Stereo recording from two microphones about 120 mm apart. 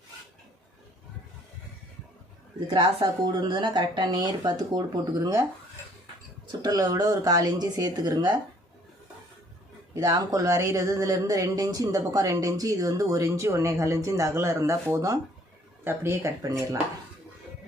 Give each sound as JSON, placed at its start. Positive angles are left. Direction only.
{"t": 2.6, "sound": "speech", "side_deg": -40}
{"t": 5.2, "sound": "speech", "side_deg": -30}
{"t": 6.6, "sound": "speech", "side_deg": -30}
{"t": 9.9, "sound": "speech", "side_deg": -30}